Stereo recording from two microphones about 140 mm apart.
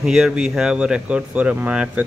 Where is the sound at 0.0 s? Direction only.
5° right (ahead or behind).